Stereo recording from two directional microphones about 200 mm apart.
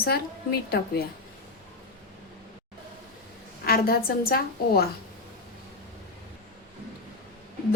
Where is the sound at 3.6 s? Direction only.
50° left (ahead or behind).